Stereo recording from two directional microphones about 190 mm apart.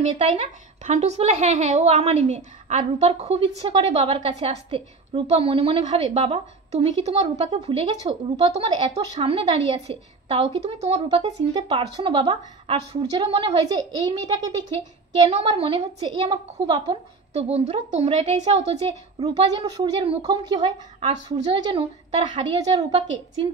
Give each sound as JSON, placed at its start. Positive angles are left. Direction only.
{"t": 0.1, "sound": "a woman's voice", "side_deg": -35}
{"t": 15.2, "sound": "a woman's voice", "side_deg": -30}
{"t": 19.2, "sound": "a woman's voice", "side_deg": -20}
{"t": 22.6, "sound": "a woman's voice", "side_deg": -20}